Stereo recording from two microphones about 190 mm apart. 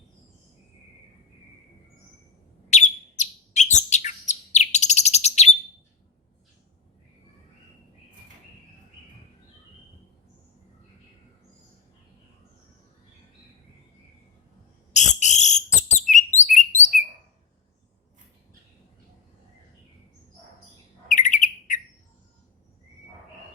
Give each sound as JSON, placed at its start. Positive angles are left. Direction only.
{"t": 2.6, "sound": "chirp", "side_deg": 40}
{"t": 14.9, "sound": "a sound", "side_deg": 40}
{"t": 21.1, "sound": "bird", "side_deg": 40}